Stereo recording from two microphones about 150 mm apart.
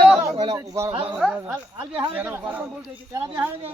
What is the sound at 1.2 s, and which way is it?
Speech, 5° right (ahead or behind).